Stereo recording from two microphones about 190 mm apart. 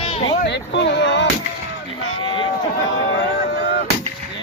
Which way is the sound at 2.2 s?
25° left (ahead or behind).